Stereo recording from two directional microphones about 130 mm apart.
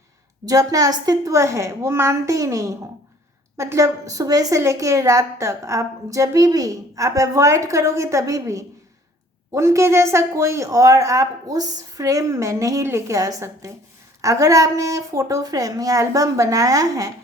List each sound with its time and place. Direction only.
0.4 s a woman's voice: 25° right (ahead or behind)